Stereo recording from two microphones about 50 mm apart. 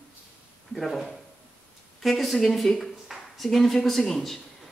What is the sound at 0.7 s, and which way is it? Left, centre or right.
A woman's voice, centre.